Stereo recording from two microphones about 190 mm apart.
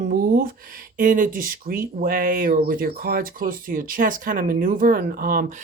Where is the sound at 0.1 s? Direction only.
50° right (ahead or behind).